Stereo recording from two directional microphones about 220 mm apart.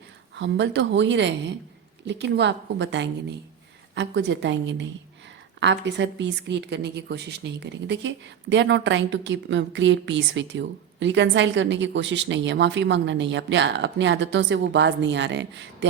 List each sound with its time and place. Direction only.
0.3 s a woman's voice: 55° right (ahead or behind)